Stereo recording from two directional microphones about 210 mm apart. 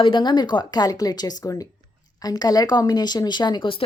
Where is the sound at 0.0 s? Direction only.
20° left (ahead or behind).